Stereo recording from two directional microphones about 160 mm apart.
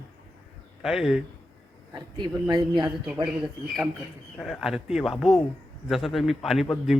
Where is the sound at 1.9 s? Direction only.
25° right (ahead or behind).